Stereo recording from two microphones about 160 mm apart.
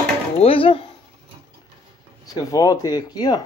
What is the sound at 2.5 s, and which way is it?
Speech, 25° left (ahead or behind).